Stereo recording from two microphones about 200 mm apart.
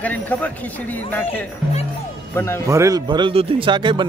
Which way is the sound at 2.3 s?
10° left (ahead or behind).